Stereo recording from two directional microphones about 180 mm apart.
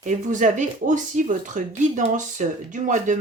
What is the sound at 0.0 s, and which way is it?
Speech, 45° right (ahead or behind).